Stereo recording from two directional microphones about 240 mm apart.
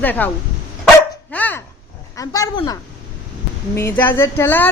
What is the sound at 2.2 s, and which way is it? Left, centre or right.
A man's voice, centre.